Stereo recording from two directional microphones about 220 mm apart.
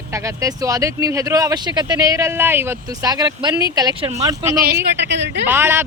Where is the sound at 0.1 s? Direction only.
15° right (ahead or behind).